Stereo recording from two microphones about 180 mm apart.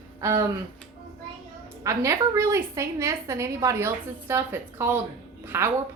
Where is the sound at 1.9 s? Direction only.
15° right (ahead or behind).